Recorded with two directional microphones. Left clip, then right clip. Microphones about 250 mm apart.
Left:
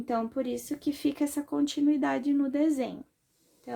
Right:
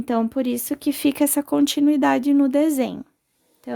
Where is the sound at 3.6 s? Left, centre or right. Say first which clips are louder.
Right 7 dB; right.